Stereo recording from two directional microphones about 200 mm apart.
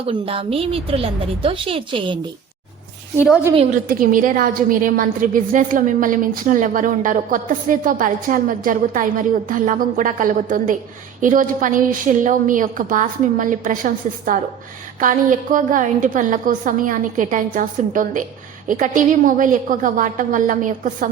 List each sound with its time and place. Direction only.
0.1 s a woman's voice: 30° right (ahead or behind)
3.2 s a woman's voice: 5° right (ahead or behind)
3.8 s a woman's voice: 45° right (ahead or behind)